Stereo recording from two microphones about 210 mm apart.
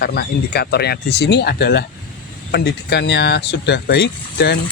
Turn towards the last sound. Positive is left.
turn(degrees=50)  # may be behind; listen again after turning